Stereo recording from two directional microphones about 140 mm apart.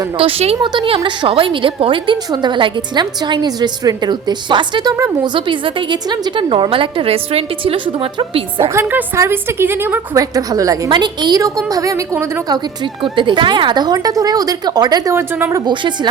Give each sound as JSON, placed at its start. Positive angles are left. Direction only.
{"t": 0.2, "sound": "a woman's voice", "side_deg": -45}
{"t": 0.7, "sound": "a woman's voice", "side_deg": -35}
{"t": 8.7, "sound": "a woman's voice", "side_deg": -15}
{"t": 12.8, "sound": "a woman's voice", "side_deg": -35}
{"t": 15.1, "sound": "a woman's voice", "side_deg": -15}
{"t": 15.6, "sound": "a woman's voice", "side_deg": -35}